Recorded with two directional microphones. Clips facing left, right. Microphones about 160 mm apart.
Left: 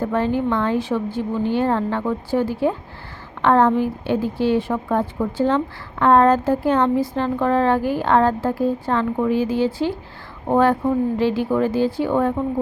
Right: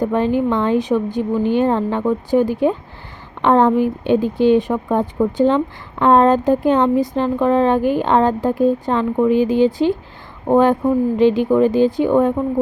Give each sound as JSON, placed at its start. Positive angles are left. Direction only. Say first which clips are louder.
{"t": 0.0, "sound": "speech", "louder": "right 3 dB", "side_deg": -15}